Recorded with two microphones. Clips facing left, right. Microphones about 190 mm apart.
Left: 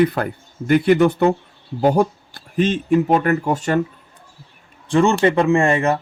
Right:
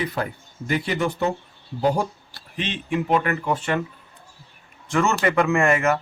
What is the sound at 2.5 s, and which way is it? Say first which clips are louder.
Speech: left 10 dB; 45° left (ahead or behind).